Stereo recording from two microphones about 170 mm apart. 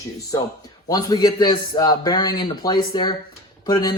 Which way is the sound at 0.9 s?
20° left (ahead or behind).